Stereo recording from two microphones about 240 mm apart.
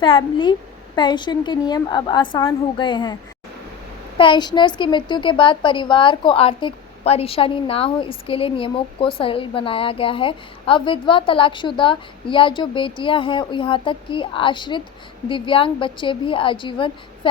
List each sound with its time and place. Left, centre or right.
0.0 s a woman's voice: left
4.2 s a woman's voice: centre